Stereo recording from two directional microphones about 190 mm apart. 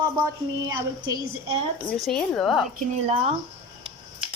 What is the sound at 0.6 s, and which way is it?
Speech, 20° right (ahead or behind).